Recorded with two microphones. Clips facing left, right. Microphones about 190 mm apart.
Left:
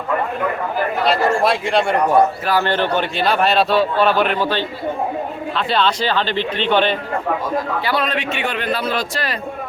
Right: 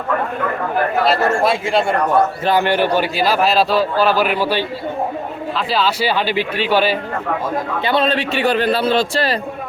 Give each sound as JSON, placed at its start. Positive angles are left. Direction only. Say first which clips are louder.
{"t": 1.0, "sound": "a man's voice", "louder": "left 1 dB", "side_deg": 0}
{"t": 2.5, "sound": "a man's voice", "louder": "right 2 dB", "side_deg": -15}
{"t": 7.9, "sound": "a man's voice", "louder": "right 3 dB", "side_deg": -25}